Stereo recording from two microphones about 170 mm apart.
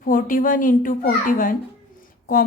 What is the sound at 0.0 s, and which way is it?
A child's voice, 55° left (ahead or behind).